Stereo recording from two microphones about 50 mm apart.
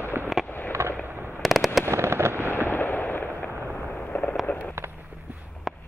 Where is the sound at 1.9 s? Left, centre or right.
Right.